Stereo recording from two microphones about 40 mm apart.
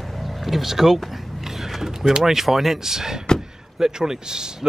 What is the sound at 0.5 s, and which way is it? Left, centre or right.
Speech, centre.